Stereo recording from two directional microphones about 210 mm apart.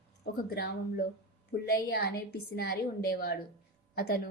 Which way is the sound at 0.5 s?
50° left (ahead or behind).